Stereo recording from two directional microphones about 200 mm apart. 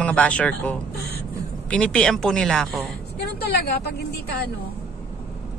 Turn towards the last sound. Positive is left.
turn(degrees=55)  # may be behind; listen again after turning